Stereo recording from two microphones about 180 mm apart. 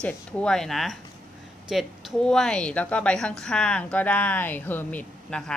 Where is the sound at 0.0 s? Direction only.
5° left (ahead or behind).